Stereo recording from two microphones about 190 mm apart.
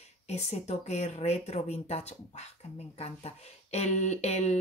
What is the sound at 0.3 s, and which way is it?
Speech, 35° left (ahead or behind).